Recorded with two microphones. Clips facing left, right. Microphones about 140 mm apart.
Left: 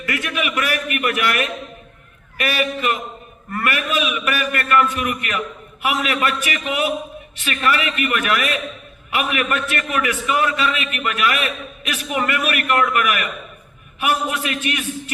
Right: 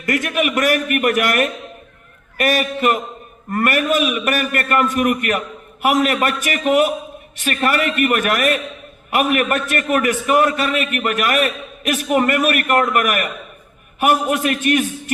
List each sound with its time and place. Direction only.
0.0 s a man's voice: 45° right (ahead or behind)